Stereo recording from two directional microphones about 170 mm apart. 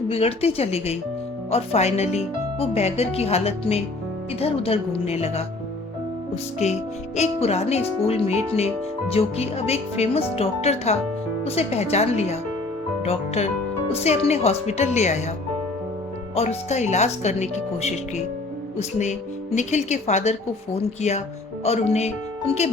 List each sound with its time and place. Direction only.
0.1 s speech: 35° left (ahead or behind)
16.3 s speech: 40° left (ahead or behind)